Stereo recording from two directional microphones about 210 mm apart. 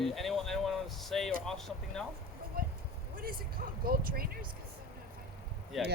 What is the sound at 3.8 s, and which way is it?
Speech, 45° right (ahead or behind).